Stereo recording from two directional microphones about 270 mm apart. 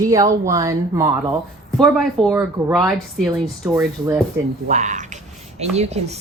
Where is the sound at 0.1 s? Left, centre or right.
Centre.